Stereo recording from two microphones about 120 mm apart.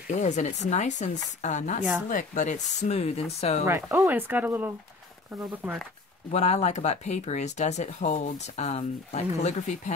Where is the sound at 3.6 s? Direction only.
25° right (ahead or behind).